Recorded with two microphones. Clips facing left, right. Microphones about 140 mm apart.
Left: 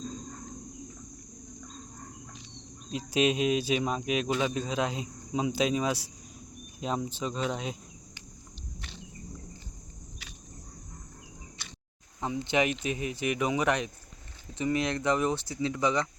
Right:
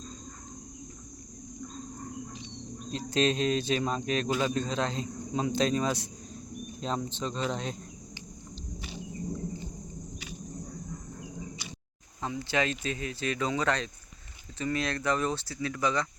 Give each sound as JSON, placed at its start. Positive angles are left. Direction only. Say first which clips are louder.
{"t": 3.1, "sound": "speech", "louder": "left 1 dB", "side_deg": 10}
{"t": 12.2, "sound": "speech", "louder": "left 2 dB", "side_deg": 20}